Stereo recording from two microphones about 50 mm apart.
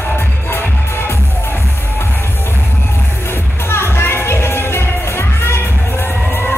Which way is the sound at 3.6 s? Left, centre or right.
Left.